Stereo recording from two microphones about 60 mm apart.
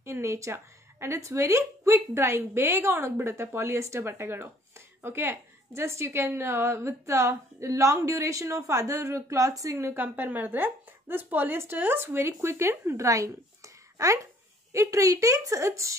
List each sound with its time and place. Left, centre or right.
0.0 s a woman's voice: right
9.9 s a woman's voice: right